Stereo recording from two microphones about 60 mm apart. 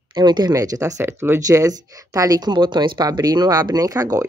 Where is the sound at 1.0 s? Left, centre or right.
Right.